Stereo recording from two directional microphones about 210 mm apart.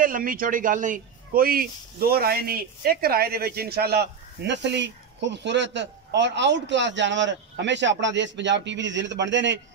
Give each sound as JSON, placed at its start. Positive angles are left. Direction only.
{"t": 0.0, "sound": "speech", "side_deg": -40}